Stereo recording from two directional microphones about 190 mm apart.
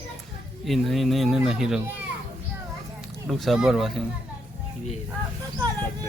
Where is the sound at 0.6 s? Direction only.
Centre (ahead or behind).